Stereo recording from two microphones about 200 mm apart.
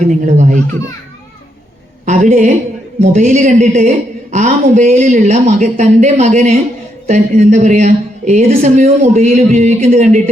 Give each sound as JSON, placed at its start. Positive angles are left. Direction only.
{"t": 0.2, "sound": "a woman's voice", "side_deg": -35}
{"t": 2.0, "sound": "a woman's voice", "side_deg": -40}